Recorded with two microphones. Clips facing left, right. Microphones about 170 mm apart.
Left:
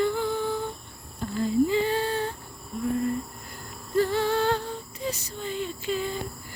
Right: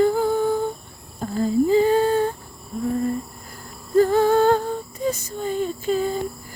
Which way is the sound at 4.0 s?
45° right (ahead or behind).